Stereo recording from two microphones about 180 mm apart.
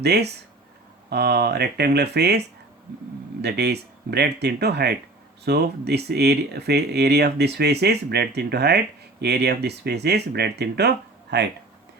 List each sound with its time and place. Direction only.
0.0 s speech: 65° right (ahead or behind)
3.4 s speech: 65° right (ahead or behind)